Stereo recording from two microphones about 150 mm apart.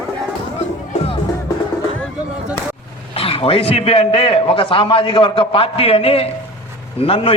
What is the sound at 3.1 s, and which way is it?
A man's voice, 40° left (ahead or behind).